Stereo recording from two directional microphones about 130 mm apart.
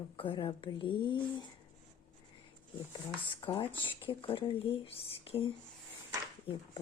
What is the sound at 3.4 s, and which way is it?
Speech, 40° left (ahead or behind).